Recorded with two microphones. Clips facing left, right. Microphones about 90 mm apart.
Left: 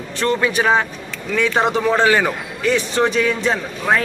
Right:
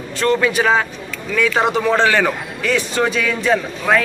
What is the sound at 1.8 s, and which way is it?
Speech, 15° left (ahead or behind).